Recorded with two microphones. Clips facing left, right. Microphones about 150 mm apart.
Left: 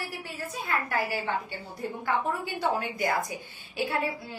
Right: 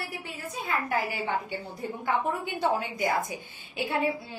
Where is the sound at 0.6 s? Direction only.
20° right (ahead or behind).